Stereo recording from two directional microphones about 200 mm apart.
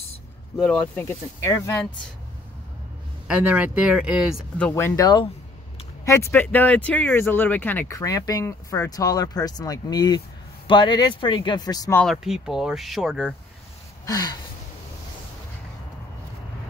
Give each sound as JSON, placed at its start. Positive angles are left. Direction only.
{"t": 0.6, "sound": "speech", "side_deg": 5}
{"t": 3.3, "sound": "speech", "side_deg": -5}
{"t": 12.0, "sound": "speech", "side_deg": 0}
{"t": 14.0, "sound": "speech", "side_deg": 20}